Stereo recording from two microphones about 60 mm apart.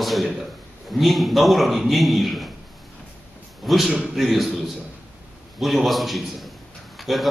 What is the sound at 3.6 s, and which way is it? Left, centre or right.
A man's voice, centre.